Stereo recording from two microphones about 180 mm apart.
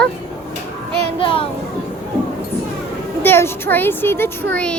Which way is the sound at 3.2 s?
15° left (ahead or behind).